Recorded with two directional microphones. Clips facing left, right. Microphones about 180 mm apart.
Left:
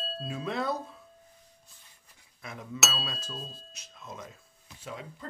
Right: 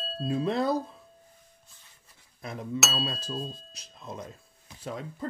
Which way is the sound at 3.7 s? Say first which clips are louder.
Right 4 dB; 35° right (ahead or behind).